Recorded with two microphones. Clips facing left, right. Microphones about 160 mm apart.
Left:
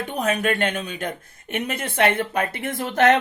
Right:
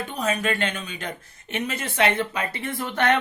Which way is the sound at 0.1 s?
60° left (ahead or behind).